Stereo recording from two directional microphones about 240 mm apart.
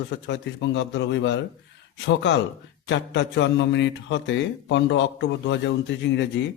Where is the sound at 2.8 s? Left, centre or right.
Left.